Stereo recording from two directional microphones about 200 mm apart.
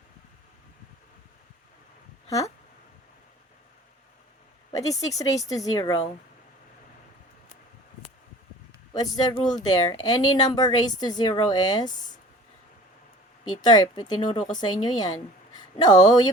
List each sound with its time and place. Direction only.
4.7 s a woman's voice: 15° left (ahead or behind)
8.9 s speech: 20° left (ahead or behind)
13.5 s a woman's voice: 20° left (ahead or behind)